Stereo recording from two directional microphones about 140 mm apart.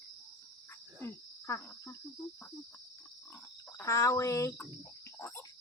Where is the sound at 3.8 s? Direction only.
20° left (ahead or behind).